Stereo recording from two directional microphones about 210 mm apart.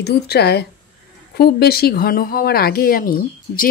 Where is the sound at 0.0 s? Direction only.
50° left (ahead or behind).